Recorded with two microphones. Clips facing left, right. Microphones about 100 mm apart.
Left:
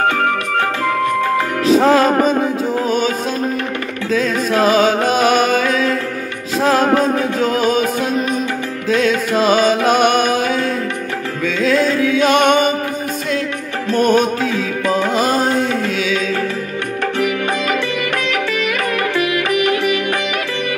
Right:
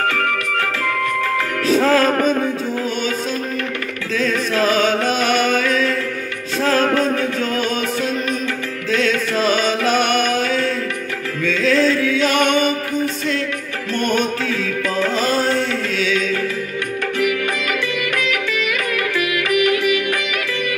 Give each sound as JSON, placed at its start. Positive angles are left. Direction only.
{"t": 0.0, "sound": "music", "side_deg": 25}
{"t": 4.1, "sound": "music", "side_deg": 25}
{"t": 14.4, "sound": "music", "side_deg": 20}
{"t": 17.2, "sound": "music", "side_deg": 35}